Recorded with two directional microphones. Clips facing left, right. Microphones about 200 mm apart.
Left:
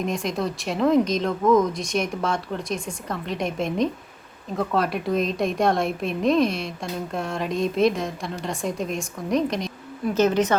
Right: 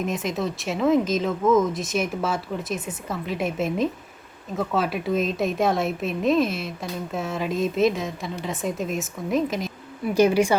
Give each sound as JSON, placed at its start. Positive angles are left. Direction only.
{"t": 0.0, "sound": "a woman's voice", "side_deg": -5}